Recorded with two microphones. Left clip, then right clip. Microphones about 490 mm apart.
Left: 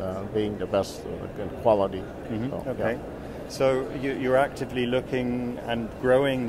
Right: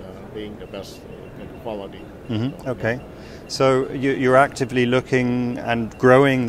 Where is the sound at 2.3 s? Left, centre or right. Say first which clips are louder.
Right 4 dB; right.